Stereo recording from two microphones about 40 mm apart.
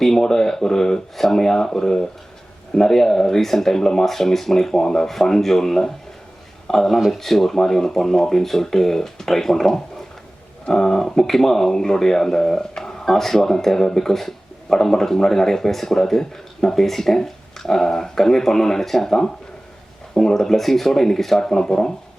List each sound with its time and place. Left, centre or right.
0.0 s speech: centre